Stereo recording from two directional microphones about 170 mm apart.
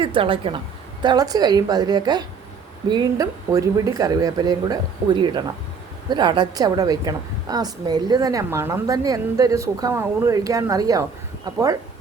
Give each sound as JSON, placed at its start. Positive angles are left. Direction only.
{"t": 0.0, "sound": "a woman's voice", "side_deg": -30}